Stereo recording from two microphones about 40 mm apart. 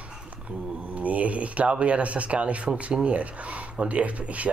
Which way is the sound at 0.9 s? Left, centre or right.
Right.